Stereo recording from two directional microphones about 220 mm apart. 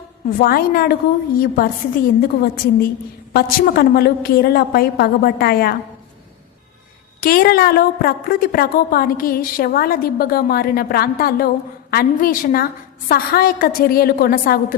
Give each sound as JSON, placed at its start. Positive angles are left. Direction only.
{"t": 0.3, "sound": "a woman's voice", "side_deg": 40}
{"t": 2.2, "sound": "a woman's voice", "side_deg": 45}
{"t": 7.2, "sound": "a woman's voice", "side_deg": 40}